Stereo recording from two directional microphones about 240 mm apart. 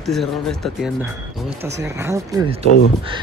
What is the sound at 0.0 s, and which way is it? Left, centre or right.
Speech, centre.